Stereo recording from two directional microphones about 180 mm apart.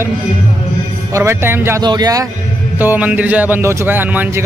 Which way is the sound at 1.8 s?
25° right (ahead or behind).